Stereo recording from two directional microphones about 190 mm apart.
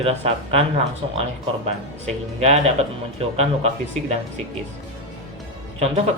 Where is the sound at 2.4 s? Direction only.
35° right (ahead or behind).